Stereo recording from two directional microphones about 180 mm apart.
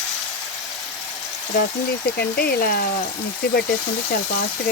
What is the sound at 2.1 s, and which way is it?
Speech, 55° left (ahead or behind).